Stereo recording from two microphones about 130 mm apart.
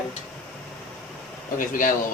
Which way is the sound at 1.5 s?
90° left.